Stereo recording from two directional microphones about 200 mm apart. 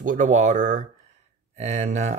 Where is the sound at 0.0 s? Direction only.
40° right (ahead or behind).